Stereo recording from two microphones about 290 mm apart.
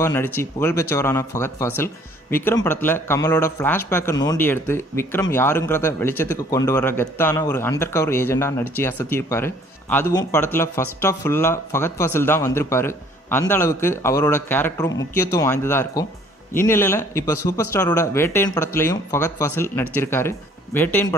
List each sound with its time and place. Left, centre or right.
0.0 s speech: centre